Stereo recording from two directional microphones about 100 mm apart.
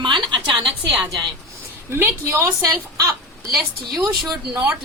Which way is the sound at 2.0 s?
20° right (ahead or behind).